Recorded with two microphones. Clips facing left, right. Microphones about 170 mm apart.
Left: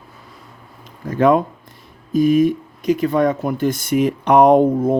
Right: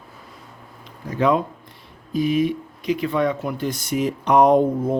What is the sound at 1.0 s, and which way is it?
Speech, 50° left (ahead or behind).